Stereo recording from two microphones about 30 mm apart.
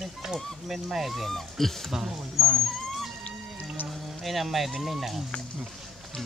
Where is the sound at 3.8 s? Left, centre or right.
Left.